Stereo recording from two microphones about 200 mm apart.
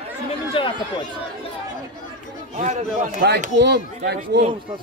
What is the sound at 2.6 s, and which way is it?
Speech, 35° right (ahead or behind).